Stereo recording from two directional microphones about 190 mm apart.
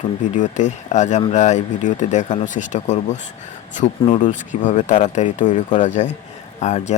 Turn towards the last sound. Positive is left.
turn(degrees=35)  # may be behind; listen again after turning